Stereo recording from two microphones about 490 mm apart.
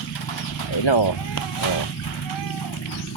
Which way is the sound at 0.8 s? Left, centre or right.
Left.